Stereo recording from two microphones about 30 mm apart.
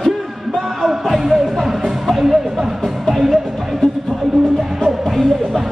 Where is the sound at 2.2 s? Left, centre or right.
Centre.